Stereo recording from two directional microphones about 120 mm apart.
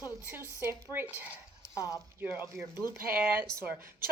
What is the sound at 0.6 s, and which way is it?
Speech, 20° right (ahead or behind).